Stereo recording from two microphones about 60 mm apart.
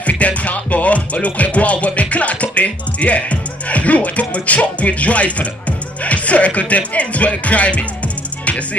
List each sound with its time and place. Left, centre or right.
0.0 s music: left